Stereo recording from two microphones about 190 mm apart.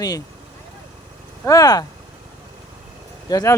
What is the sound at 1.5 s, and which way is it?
Speech, 20° left (ahead or behind).